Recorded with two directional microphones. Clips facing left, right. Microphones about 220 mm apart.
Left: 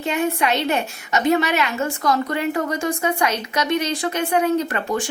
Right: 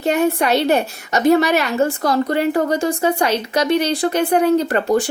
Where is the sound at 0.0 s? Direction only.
40° right (ahead or behind).